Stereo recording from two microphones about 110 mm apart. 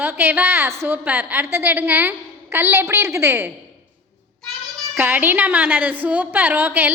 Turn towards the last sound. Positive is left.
turn(degrees=-15)  # may be behind; listen again after turning